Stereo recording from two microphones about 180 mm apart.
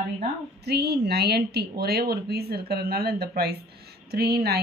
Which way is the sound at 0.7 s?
65° right (ahead or behind).